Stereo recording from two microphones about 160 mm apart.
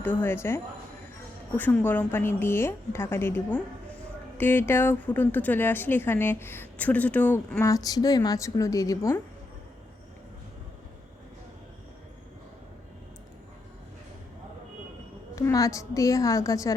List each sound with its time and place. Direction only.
0.0 s speech: 15° left (ahead or behind)
15.4 s a woman's voice: 20° left (ahead or behind)